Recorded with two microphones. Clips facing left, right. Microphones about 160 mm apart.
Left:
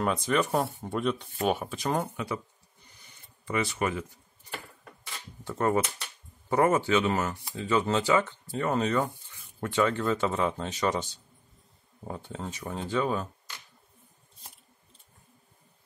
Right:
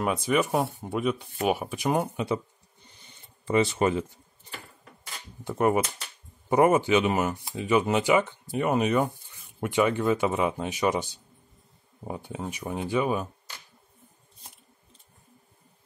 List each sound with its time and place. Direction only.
0.0 s speech: 5° right (ahead or behind)
3.1 s a sound: 25° right (ahead or behind)
5.4 s speech: 15° right (ahead or behind)